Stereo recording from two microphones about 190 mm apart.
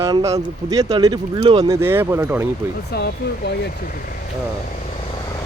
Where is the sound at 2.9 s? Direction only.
60° left (ahead or behind).